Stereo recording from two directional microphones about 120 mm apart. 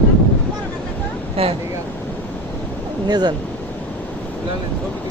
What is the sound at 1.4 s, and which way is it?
Speech, 50° right (ahead or behind).